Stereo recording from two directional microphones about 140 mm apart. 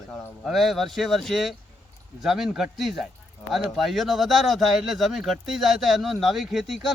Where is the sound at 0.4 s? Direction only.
Centre (ahead or behind).